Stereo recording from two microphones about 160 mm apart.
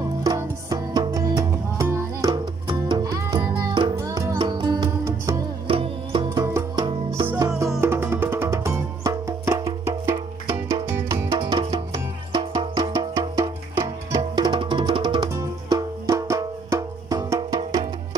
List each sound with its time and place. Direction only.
0.2 s music: 20° right (ahead or behind)
11.3 s music: 30° right (ahead or behind)